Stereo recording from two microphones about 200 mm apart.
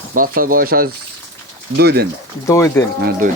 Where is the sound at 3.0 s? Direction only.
45° right (ahead or behind).